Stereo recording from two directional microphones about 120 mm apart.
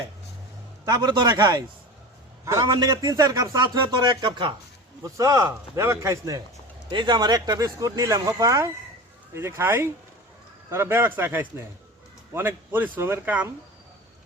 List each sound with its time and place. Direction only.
0.9 s a man's voice: 35° right (ahead or behind)
2.6 s speech: 40° right (ahead or behind)
5.0 s speech: 25° right (ahead or behind)
6.9 s speech: 40° right (ahead or behind)
9.3 s speech: 20° right (ahead or behind)